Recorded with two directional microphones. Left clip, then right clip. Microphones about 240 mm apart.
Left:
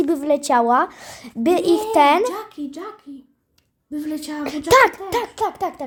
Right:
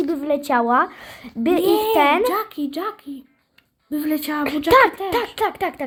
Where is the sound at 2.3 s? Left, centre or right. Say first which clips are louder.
Right 5 dB; right.